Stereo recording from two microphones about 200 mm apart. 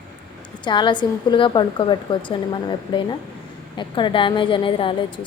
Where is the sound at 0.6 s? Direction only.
25° left (ahead or behind).